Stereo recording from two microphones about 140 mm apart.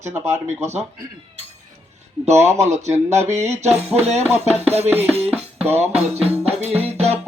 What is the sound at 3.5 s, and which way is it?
Music, 55° right (ahead or behind).